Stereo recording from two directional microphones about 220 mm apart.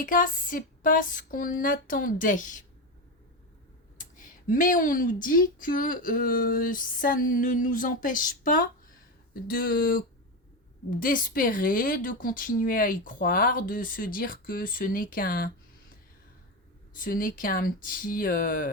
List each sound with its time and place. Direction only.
0.0 s speech: 40° left (ahead or behind)
3.9 s speech: 35° left (ahead or behind)
11.0 s speech: 40° left (ahead or behind)
16.9 s speech: 40° left (ahead or behind)